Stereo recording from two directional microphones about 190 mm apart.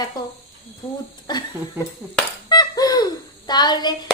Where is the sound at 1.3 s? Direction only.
20° left (ahead or behind).